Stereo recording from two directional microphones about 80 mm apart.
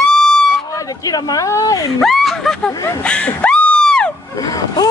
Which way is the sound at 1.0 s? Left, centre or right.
Left.